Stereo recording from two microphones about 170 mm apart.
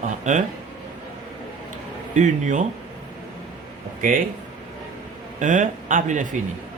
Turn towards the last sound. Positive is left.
turn(degrees=-50)  # may be behind; listen again after turning